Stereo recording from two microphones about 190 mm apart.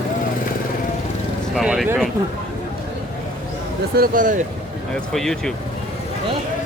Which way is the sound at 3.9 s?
50° right (ahead or behind).